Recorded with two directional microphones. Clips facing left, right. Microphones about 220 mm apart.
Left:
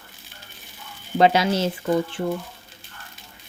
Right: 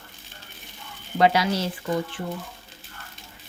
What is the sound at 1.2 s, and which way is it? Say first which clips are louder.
Speech: left 3 dB; 25° left (ahead or behind).